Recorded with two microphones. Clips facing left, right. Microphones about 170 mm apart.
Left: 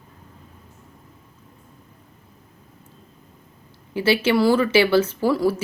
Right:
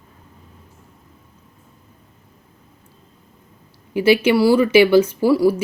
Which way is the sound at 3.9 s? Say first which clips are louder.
Right 4 dB; 15° right (ahead or behind).